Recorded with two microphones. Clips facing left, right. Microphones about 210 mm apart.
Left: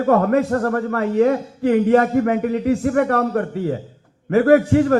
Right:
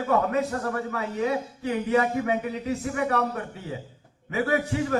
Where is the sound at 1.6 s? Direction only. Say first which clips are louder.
Left 10 dB; 65° left (ahead or behind).